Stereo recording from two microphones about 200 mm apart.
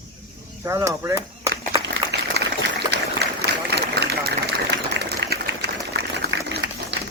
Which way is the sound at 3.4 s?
55° right (ahead or behind).